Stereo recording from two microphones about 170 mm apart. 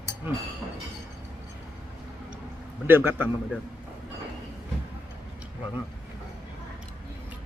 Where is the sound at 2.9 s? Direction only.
10° right (ahead or behind).